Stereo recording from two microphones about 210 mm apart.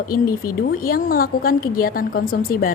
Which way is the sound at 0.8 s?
45° left (ahead or behind).